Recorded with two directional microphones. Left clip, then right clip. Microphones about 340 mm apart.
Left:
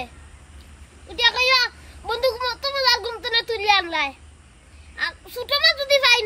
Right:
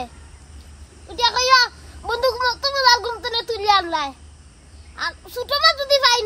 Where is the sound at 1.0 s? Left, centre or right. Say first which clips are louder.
Even; centre.